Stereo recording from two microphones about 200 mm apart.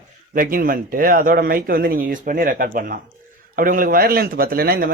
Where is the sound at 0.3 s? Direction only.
45° right (ahead or behind).